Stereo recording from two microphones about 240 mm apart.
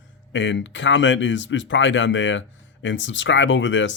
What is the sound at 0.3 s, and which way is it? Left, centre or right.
Speech, left.